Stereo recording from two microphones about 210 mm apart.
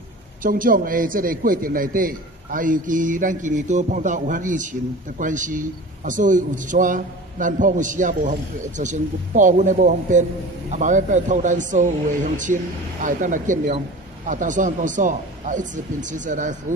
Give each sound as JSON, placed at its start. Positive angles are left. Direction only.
{"t": 0.4, "sound": "a man's voice", "side_deg": -40}